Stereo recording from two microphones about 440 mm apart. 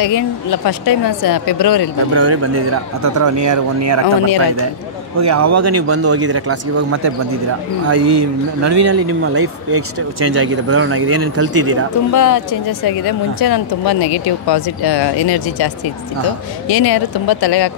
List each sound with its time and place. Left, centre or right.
0.0 s speech: left
2.1 s speech: right
5.2 s speech: right
12.1 s speech: left